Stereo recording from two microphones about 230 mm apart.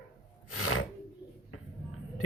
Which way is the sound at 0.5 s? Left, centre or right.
Left.